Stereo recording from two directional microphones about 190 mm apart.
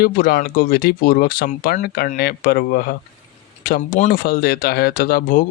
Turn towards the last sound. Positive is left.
turn(degrees=50)  # may be behind; listen again after turning